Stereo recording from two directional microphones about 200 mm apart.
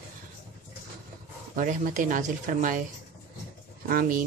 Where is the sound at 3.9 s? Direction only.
45° right (ahead or behind).